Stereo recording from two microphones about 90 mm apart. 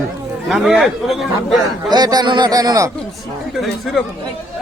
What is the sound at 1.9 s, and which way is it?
Speech, 50° right (ahead or behind).